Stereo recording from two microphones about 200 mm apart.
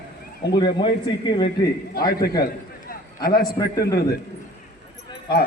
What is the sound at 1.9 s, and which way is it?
Speech, 45° left (ahead or behind).